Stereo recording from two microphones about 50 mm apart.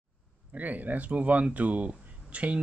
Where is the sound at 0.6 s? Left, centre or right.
Right.